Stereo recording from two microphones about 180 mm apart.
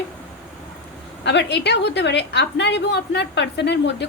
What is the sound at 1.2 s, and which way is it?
A woman's voice, 70° left (ahead or behind).